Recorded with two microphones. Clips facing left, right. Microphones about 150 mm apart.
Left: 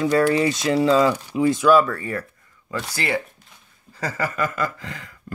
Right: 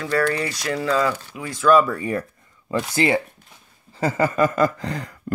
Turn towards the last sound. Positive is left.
turn(degrees=-40)  # may be behind; listen again after turning